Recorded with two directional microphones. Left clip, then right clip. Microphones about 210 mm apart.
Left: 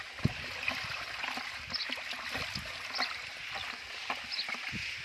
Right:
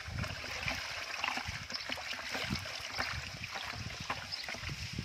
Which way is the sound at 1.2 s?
10° right (ahead or behind).